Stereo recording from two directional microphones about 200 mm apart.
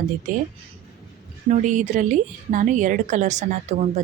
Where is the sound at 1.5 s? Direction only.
40° right (ahead or behind).